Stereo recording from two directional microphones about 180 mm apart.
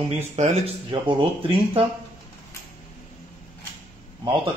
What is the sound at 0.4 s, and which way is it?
Speech, 40° right (ahead or behind).